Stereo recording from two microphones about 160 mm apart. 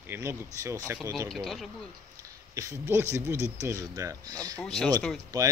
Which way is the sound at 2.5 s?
15° right (ahead or behind).